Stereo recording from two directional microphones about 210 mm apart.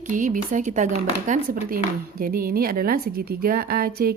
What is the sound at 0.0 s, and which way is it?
Speech, 40° right (ahead or behind).